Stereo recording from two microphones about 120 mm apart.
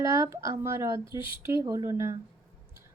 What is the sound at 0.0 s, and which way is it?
Speech, 25° right (ahead or behind).